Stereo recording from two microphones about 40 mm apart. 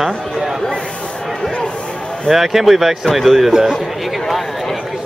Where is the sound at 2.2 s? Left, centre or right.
Centre.